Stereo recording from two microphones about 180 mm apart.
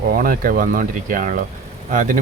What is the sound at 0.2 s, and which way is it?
Speech, 50° right (ahead or behind).